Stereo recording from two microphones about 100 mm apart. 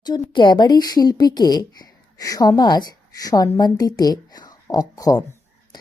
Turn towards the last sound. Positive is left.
turn(degrees=45)  # may be behind; listen again after turning